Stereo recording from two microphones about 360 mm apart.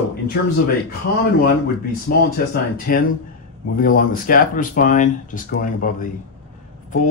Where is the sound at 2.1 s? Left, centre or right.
Left.